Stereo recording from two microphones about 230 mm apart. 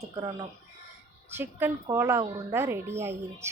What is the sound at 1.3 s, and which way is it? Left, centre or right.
Speech, centre.